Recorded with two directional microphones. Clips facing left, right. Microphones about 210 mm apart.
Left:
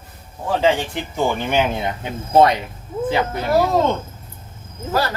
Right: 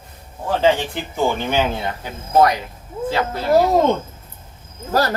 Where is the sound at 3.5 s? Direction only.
15° right (ahead or behind).